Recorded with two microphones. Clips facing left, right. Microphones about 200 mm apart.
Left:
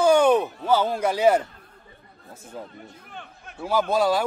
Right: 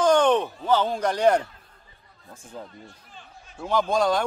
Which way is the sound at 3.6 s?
5° left (ahead or behind).